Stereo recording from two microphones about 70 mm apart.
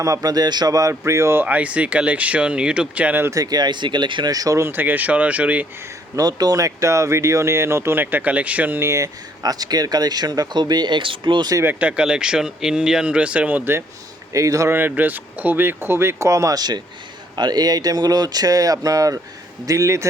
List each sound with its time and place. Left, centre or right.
0.0 s speech: right
0.7 s speech: right
1.5 s speech: right
3.3 s speech: right
4.7 s speech: right
6.1 s speech: right
8.0 s speech: right
8.8 s speech: right
9.4 s speech: right
11.6 s speech: right
14.3 s speech: right
14.7 s speech: right
16.6 s speech: right